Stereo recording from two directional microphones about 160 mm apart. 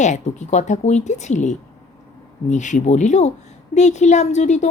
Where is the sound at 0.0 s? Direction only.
50° left (ahead or behind).